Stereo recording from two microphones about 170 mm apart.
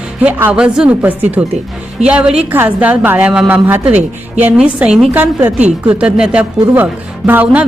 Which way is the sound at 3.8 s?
40° right (ahead or behind).